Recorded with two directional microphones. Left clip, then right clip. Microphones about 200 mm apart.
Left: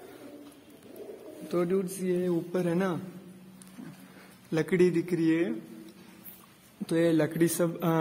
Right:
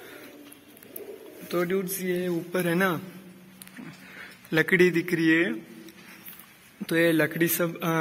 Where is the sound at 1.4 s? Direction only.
10° left (ahead or behind).